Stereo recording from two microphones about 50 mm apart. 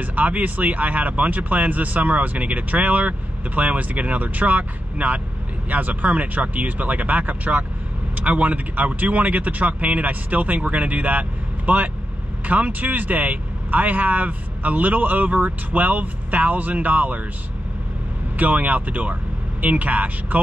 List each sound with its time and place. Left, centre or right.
0.0 s speech: right
18.3 s speech: right